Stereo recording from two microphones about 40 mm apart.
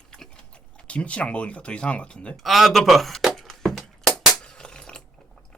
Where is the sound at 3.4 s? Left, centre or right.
Centre.